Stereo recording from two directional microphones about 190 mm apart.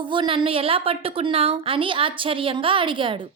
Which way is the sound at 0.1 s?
25° right (ahead or behind).